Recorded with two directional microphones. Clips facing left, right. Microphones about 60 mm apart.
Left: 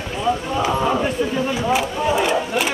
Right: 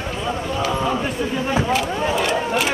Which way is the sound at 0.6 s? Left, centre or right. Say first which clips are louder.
Even; centre.